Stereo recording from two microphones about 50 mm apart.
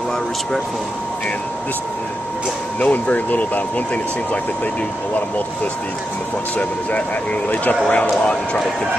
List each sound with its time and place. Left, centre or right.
2.8 s speech: left
7.4 s speech: left